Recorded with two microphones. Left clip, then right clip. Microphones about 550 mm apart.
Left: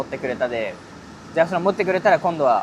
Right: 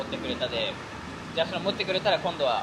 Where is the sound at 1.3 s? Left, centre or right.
Left.